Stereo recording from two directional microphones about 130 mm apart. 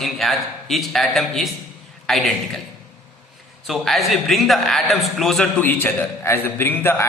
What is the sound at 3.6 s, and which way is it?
A man's voice, centre (ahead or behind).